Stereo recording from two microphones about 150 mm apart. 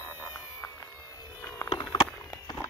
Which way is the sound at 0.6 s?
20° left (ahead or behind).